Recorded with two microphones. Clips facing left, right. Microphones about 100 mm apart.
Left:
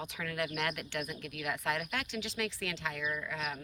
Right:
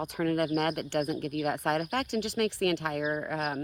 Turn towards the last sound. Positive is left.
turn(degrees=-50)  # may be behind; listen again after turning